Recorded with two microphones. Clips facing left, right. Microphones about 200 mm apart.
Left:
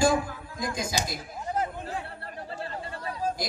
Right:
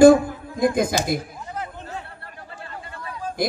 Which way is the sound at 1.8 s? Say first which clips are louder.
Even; 35° left (ahead or behind).